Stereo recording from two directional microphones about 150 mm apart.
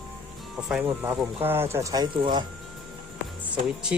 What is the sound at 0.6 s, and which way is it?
Speech, 10° right (ahead or behind).